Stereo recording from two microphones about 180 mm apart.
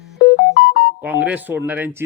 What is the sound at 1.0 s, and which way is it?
Speech, 10° right (ahead or behind).